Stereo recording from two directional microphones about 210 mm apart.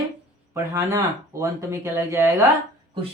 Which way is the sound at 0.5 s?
15° right (ahead or behind).